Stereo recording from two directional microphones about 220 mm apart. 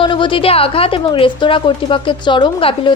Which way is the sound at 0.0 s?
20° left (ahead or behind).